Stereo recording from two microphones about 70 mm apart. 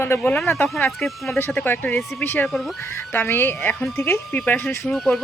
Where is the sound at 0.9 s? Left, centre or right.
Centre.